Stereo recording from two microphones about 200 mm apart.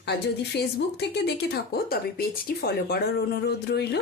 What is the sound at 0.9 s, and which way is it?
Speech, 55° left (ahead or behind).